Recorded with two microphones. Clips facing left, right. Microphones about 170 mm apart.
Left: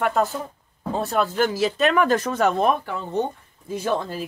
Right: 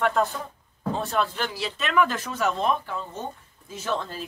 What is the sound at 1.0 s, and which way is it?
Speech, 40° left (ahead or behind).